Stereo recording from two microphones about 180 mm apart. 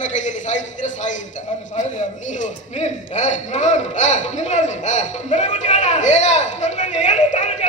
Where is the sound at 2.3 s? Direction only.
45° left (ahead or behind).